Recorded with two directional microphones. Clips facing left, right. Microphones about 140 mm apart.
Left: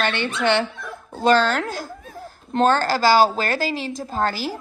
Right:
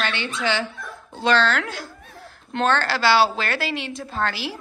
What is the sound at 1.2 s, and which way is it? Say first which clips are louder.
A woman's voice: left 3 dB; 45° left (ahead or behind).